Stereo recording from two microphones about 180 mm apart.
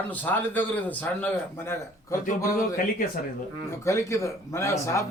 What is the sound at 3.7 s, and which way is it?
A man's voice, 15° left (ahead or behind).